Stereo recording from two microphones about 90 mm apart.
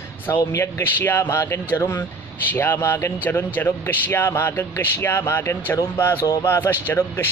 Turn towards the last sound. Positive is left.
turn(degrees=25)  # may be behind; listen again after turning